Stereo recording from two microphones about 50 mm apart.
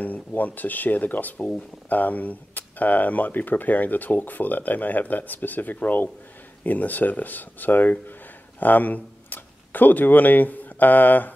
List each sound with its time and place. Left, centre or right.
0.0 s speech: left